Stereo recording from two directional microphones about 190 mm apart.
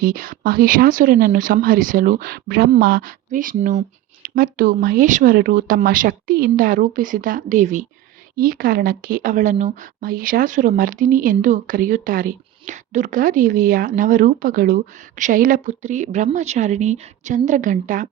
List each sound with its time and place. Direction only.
0.0 s a woman's voice: 45° right (ahead or behind)